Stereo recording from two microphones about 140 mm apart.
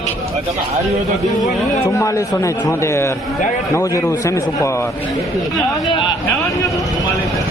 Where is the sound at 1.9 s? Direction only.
20° left (ahead or behind).